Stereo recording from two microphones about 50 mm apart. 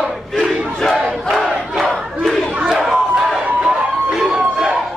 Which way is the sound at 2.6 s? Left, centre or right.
Centre.